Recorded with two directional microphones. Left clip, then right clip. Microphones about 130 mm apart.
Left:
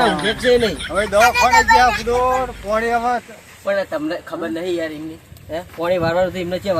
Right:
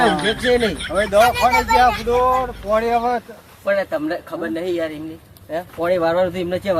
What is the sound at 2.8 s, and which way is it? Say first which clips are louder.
Speech: even; 25° right (ahead or behind).